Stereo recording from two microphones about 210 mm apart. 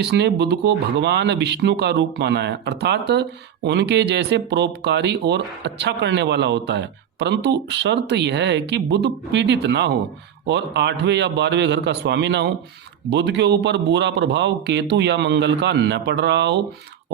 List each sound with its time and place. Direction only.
0.0 s speech: 55° right (ahead or behind)